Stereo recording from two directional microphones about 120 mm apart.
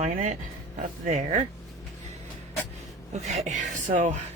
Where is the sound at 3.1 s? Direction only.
65° right (ahead or behind); by 4.1 s 90° right.